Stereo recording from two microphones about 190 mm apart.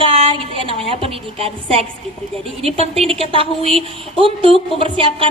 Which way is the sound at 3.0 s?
30° right (ahead or behind).